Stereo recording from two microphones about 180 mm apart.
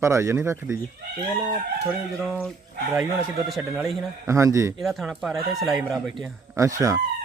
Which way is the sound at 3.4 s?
Centre (ahead or behind).